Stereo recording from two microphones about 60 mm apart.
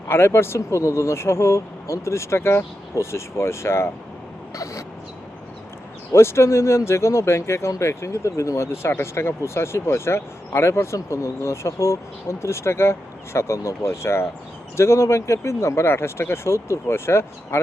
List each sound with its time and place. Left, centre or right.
0.1 s speech: left
4.5 s a sound: left
6.1 s speech: left